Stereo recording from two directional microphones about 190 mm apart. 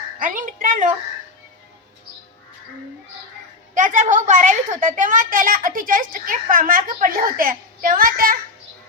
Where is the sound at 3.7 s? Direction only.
40° right (ahead or behind).